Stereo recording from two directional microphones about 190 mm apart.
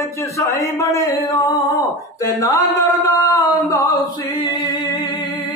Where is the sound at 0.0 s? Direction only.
15° left (ahead or behind).